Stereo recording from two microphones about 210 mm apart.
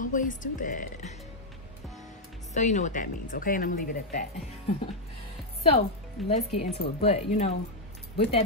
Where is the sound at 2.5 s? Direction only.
35° left (ahead or behind).